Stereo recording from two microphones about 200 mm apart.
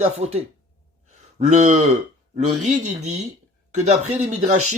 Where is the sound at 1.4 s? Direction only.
35° right (ahead or behind).